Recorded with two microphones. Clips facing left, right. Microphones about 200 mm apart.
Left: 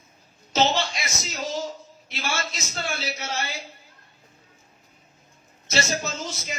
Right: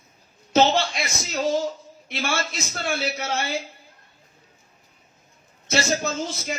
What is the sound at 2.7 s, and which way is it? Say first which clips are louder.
Speech: right 4 dB; 55° right (ahead or behind).